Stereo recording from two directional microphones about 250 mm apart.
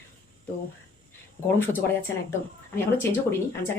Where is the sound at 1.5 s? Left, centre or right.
Centre.